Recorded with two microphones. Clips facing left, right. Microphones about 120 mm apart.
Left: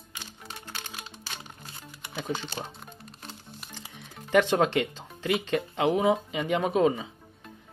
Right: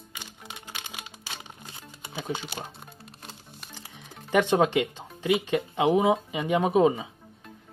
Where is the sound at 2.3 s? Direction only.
10° right (ahead or behind).